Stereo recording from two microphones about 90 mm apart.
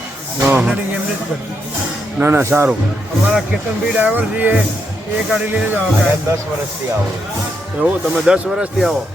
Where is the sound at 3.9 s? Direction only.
20° right (ahead or behind).